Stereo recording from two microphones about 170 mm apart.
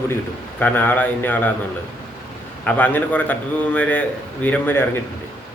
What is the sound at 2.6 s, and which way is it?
A man's voice, 10° left (ahead or behind).